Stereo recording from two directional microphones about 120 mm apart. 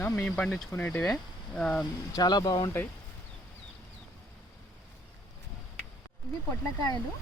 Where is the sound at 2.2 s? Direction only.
35° left (ahead or behind).